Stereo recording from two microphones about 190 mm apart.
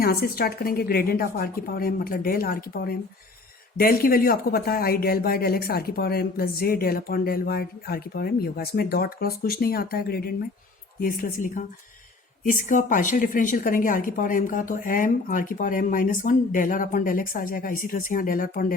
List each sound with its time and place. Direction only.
0.0 s speech: 55° left (ahead or behind)